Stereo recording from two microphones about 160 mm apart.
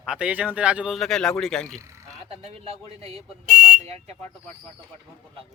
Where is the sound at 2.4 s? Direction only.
35° right (ahead or behind).